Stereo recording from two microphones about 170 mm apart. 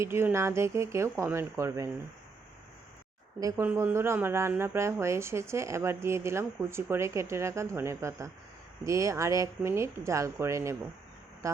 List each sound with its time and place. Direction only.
0.0 s speech: 15° right (ahead or behind)
3.4 s speech: 15° right (ahead or behind)